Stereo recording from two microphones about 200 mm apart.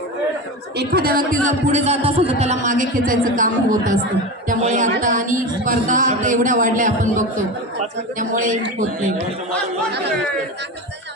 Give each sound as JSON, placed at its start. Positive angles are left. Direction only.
{"t": 0.8, "sound": "speech", "side_deg": -50}